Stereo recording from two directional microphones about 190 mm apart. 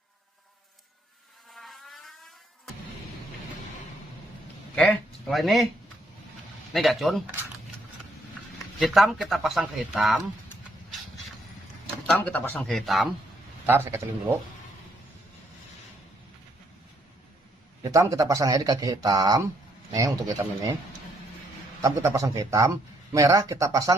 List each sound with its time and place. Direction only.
1.5 s vehicle: centre (ahead or behind)
4.7 s speech: 5° left (ahead or behind)
6.7 s speech: centre (ahead or behind)
8.8 s speech: centre (ahead or behind)
12.0 s speech: 10° left (ahead or behind)
13.7 s a man's voice: 10° right (ahead or behind)
17.8 s a man's voice: 15° right (ahead or behind)
21.8 s a man's voice: 15° right (ahead or behind)